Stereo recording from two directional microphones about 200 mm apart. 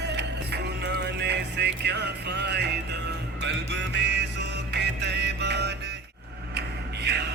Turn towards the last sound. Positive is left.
turn(degrees=-55)  # may be behind; listen again after turning